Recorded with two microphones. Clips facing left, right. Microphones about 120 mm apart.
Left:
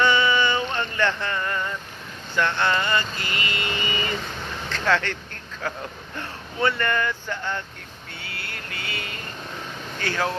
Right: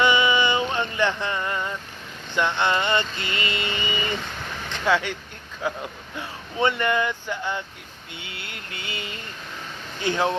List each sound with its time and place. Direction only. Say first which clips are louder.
0.0 s a sound: even; 15° right (ahead or behind)
2.3 s vehicle: even; 15° right (ahead or behind)
4.7 s vehicle: even; 15° right (ahead or behind)
5.6 s speech: right 3 dB; 10° right (ahead or behind)
8.1 s a sound: left 1 dB; 20° right (ahead or behind)
10.0 s vehicle: right 3 dB; 20° right (ahead or behind)